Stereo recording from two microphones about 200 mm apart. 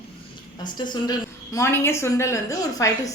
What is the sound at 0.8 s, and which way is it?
A woman's voice, 20° left (ahead or behind).